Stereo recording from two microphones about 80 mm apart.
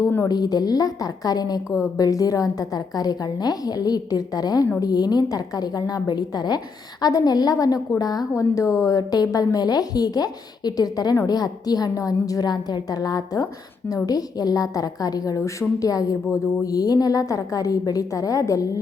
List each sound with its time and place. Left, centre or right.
0.3 s a woman's voice: left
8.4 s a woman's voice: left